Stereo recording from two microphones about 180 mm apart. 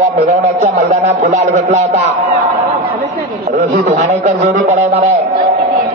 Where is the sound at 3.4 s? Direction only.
35° right (ahead or behind).